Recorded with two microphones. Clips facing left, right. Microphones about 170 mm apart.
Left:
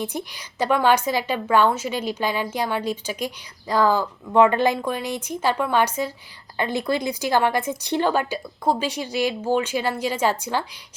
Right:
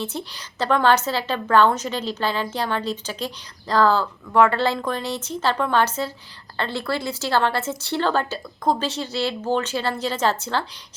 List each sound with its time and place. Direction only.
0.0 s a woman's voice: 15° left (ahead or behind)